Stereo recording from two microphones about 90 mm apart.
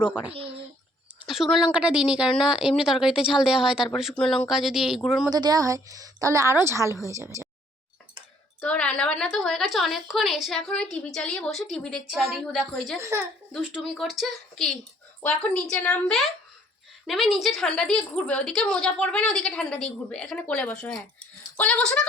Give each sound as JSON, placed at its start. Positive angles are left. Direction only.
{"t": 1.3, "sound": "speech", "side_deg": -5}
{"t": 4.2, "sound": "speech", "side_deg": 5}
{"t": 4.4, "sound": "a woman's voice", "side_deg": -5}
{"t": 5.3, "sound": "a woman's voice", "side_deg": -45}
{"t": 8.6, "sound": "a woman's voice", "side_deg": 15}
{"t": 13.0, "sound": "a woman's voice", "side_deg": -35}
{"t": 13.8, "sound": "a woman's voice", "side_deg": 0}
{"t": 17.1, "sound": "speech", "side_deg": 0}